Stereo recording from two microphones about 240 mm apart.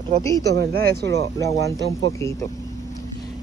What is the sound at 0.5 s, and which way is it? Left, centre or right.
Speech, right.